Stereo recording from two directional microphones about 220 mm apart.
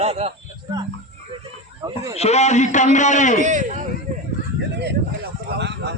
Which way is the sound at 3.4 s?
35° right (ahead or behind).